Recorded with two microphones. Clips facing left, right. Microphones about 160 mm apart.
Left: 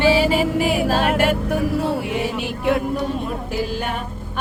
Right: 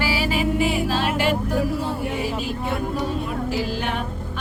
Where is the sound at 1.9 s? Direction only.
70° left (ahead or behind).